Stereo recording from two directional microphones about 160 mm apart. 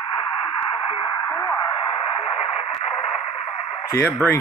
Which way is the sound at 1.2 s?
20° left (ahead or behind).